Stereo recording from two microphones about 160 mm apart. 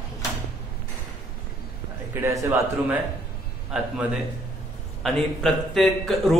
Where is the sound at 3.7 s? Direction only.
5° right (ahead or behind).